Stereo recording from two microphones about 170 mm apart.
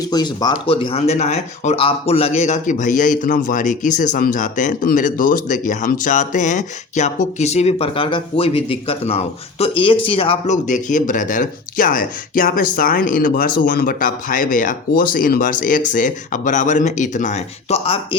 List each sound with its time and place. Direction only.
0.0 s speech: 25° left (ahead or behind)